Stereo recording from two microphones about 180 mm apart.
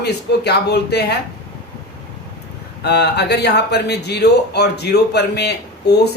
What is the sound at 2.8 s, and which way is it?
Speech, 65° left (ahead or behind).